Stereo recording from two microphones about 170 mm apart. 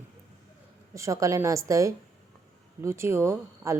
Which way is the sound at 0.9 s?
20° right (ahead or behind).